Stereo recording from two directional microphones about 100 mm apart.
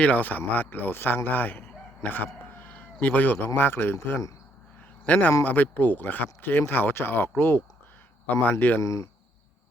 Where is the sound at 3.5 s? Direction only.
20° left (ahead or behind).